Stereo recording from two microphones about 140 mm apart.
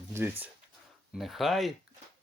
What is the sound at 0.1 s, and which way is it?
Speech, 15° right (ahead or behind).